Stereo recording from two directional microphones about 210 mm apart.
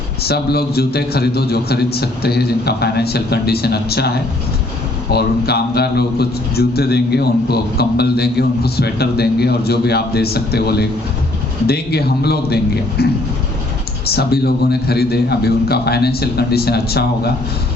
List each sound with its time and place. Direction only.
0.2 s a man's voice: 50° left (ahead or behind)
5.1 s a man's voice: 50° left (ahead or behind)
14.2 s a man's voice: 50° left (ahead or behind)